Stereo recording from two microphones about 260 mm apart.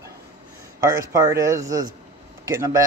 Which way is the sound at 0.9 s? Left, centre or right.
Centre.